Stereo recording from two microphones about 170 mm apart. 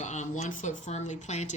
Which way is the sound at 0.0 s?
45° left (ahead or behind).